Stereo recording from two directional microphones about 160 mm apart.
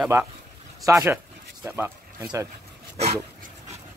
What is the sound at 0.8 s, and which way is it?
Speech, 20° right (ahead or behind).